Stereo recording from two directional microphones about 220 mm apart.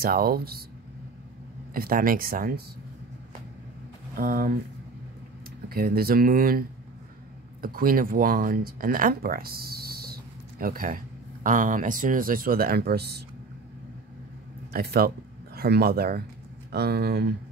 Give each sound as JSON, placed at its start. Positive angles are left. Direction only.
{"t": 0.0, "sound": "speech", "side_deg": -45}
{"t": 1.7, "sound": "speech", "side_deg": -40}
{"t": 4.2, "sound": "speech", "side_deg": -40}
{"t": 5.7, "sound": "speech", "side_deg": -45}
{"t": 7.6, "sound": "speech", "side_deg": -40}
{"t": 14.7, "sound": "speech", "side_deg": -45}